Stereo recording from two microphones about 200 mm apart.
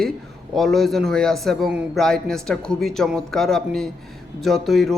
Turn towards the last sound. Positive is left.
turn(degrees=0)  # may be behind; listen again after turning